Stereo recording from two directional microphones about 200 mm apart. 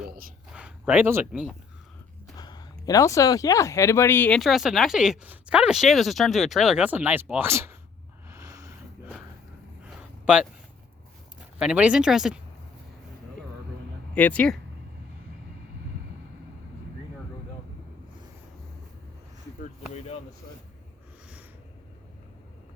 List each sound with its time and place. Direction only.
0.5 s speech: 5° right (ahead or behind)
2.3 s speech: 20° left (ahead or behind); by 7.8 s 10° right (ahead or behind)
8.3 s a sound: 15° right (ahead or behind)
10.3 s speech: 5° right (ahead or behind)
11.6 s speech: 5° right (ahead or behind)
14.2 s speech: 5° left (ahead or behind)